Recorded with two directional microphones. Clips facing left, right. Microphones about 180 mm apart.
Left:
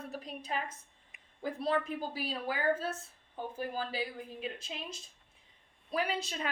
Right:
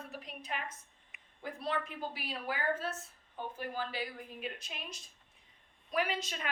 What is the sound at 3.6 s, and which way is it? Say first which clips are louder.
A woman's voice: left 3 dB; 30° left (ahead or behind).